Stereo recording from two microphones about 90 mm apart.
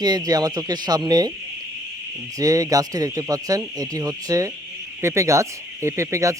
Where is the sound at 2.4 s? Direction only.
40° right (ahead or behind).